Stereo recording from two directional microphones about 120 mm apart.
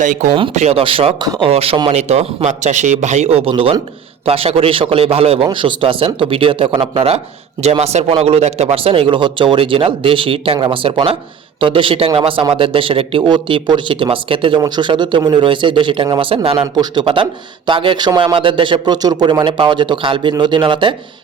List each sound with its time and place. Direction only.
0.0 s speech: 80° right
0.5 s a man's voice: 65° right (ahead or behind); by 1.9 s 50° right (ahead or behind)
1.9 s a man's voice: 65° right (ahead or behind)
5.5 s a man's voice: 45° right (ahead or behind)
7.6 s a man's voice: 65° right (ahead or behind)
16.8 s speech: 40° right (ahead or behind)